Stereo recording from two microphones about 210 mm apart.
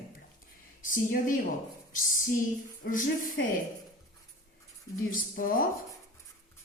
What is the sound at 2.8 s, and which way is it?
Speech, 50° left (ahead or behind).